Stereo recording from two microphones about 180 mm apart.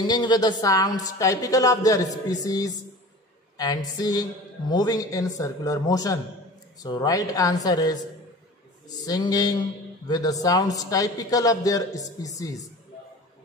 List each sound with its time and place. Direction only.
0.0 s a man's voice: 25° left (ahead or behind)
9.0 s a man's voice: 20° left (ahead or behind)